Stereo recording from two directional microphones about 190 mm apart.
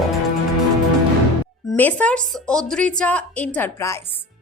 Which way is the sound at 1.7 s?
10° left (ahead or behind).